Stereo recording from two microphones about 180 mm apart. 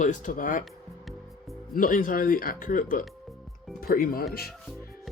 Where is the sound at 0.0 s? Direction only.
45° left (ahead or behind).